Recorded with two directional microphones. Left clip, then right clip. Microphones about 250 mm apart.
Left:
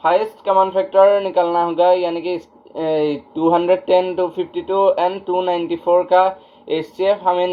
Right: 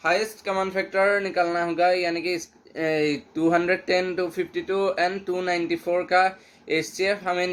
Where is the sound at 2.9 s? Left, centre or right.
Right.